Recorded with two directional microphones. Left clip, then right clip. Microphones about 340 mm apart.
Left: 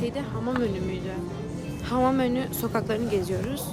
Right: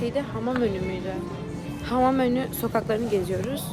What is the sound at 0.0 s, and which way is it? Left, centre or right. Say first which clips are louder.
Speech: right 3 dB; centre.